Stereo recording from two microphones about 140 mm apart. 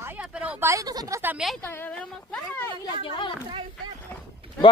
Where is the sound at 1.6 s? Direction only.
15° left (ahead or behind).